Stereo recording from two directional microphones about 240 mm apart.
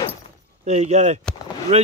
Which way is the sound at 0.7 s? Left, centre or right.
Right.